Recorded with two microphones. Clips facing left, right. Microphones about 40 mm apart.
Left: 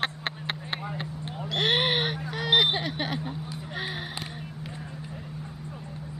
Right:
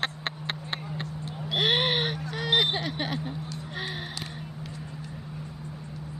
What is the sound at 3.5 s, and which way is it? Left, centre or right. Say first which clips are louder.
Music: left 1 dB; centre.